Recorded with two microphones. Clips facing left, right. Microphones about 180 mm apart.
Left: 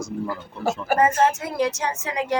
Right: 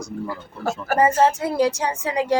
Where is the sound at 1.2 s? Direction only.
30° right (ahead or behind).